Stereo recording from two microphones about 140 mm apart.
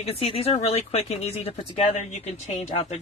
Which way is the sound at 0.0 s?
45° left (ahead or behind).